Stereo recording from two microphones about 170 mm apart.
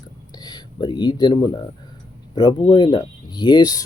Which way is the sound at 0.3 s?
25° left (ahead or behind).